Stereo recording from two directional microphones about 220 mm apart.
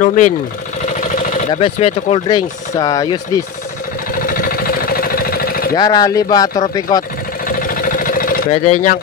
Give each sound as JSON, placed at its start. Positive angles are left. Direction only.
{"t": 0.0, "sound": "speech", "side_deg": 35}
{"t": 1.0, "sound": "vehicle", "side_deg": 35}
{"t": 1.5, "sound": "speech", "side_deg": 25}
{"t": 4.2, "sound": "vehicle", "side_deg": 40}
{"t": 5.8, "sound": "speech", "side_deg": 15}
{"t": 7.4, "sound": "vehicle", "side_deg": 40}